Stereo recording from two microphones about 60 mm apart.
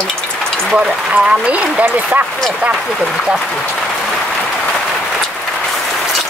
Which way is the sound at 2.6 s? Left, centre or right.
Centre.